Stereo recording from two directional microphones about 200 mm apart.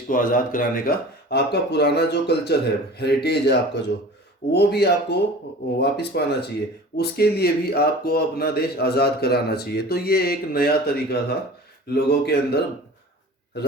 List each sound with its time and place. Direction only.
0.1 s speech: 40° left (ahead or behind)